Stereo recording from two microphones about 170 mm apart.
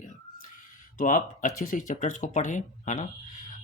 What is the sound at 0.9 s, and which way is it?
Speech, 50° left (ahead or behind).